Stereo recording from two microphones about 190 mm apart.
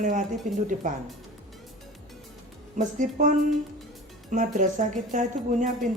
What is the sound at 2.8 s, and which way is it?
Speech, 40° right (ahead or behind).